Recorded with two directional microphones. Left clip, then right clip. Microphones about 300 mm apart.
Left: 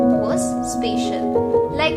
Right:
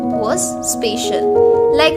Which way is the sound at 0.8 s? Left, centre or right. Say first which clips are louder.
Right 6 dB; right.